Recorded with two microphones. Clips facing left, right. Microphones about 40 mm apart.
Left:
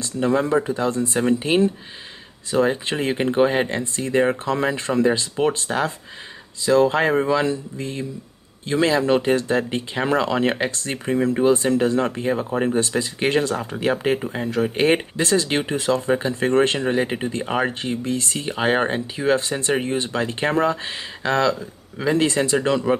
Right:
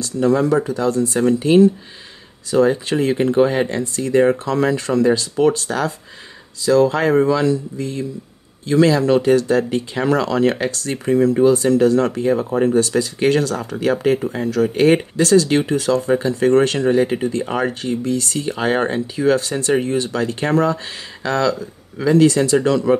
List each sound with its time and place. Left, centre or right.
0.0 s speech: left
4.2 s speech: centre
11.1 s speech: centre